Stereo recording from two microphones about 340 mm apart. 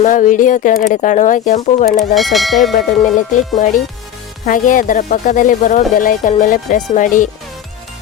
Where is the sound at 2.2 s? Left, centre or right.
Centre.